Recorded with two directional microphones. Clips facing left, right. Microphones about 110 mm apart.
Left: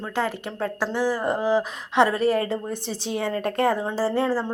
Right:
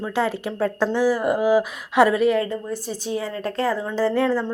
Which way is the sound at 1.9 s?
30° left (ahead or behind).